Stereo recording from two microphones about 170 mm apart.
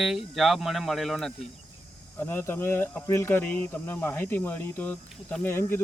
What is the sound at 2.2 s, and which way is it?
Speech, 15° left (ahead or behind).